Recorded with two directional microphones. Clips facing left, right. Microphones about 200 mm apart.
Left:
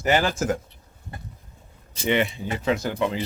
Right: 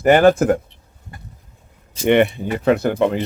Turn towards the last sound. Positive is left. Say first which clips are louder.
# right 7 dB
turn(degrees=-55)  # may be behind; listen again after turning